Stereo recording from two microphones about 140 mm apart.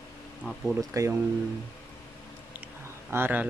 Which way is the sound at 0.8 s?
20° right (ahead or behind).